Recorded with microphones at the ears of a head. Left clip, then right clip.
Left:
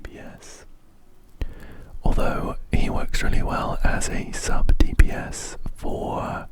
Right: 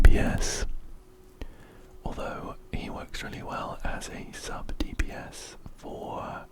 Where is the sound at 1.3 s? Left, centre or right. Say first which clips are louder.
Left 7 dB; left.